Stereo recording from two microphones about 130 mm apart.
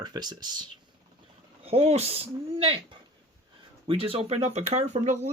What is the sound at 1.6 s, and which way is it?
Speech, 50° right (ahead or behind).